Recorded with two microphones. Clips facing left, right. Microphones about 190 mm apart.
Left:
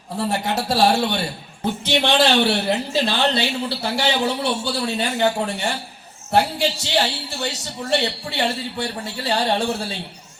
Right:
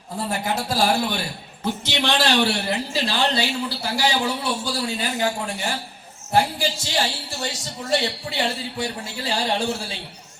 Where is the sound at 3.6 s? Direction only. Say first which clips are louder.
Left 2 dB; 60° left (ahead or behind).